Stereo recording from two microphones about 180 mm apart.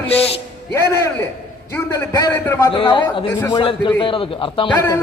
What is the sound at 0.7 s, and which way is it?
A man's voice, 15° left (ahead or behind).